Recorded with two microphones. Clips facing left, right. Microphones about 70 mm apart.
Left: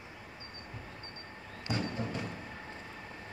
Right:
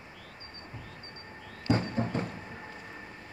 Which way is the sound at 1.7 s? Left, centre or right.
Right.